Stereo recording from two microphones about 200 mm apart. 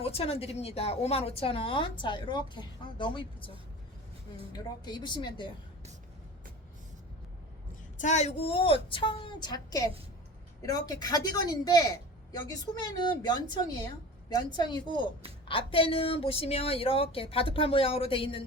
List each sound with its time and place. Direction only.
0.0 s a woman's voice: 30° left (ahead or behind)
4.5 s a woman's voice: 20° left (ahead or behind)
7.9 s a woman's voice: 35° left (ahead or behind)